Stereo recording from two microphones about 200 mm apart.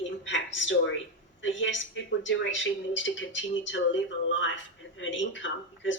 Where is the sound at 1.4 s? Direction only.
70° left (ahead or behind).